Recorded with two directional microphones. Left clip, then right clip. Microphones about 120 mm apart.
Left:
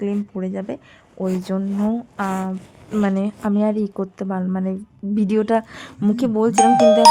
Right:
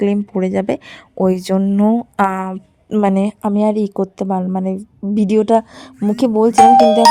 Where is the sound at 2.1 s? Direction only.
90° right.